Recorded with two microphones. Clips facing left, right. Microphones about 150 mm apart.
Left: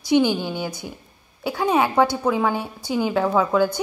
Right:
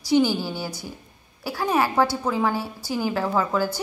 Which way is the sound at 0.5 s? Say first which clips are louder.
Left 3 dB; 10° right (ahead or behind).